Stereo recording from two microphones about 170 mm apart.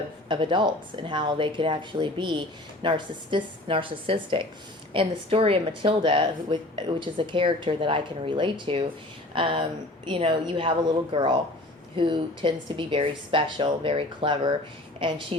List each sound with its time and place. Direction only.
0.3 s speech: 30° right (ahead or behind)